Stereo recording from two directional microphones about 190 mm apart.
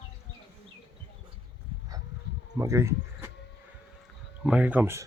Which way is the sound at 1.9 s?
20° right (ahead or behind).